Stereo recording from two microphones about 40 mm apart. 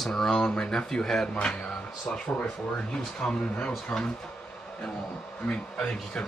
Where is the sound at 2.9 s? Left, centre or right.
Left.